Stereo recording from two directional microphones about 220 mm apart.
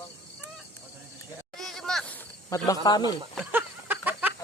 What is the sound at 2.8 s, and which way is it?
Speech, 20° left (ahead or behind).